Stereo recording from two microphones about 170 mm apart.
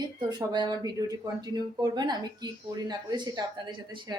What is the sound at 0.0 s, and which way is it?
Speech, 25° right (ahead or behind).